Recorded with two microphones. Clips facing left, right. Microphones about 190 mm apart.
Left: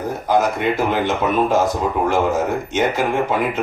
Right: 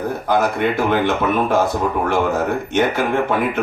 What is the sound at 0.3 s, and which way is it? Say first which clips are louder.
Speech: even; 60° right (ahead or behind).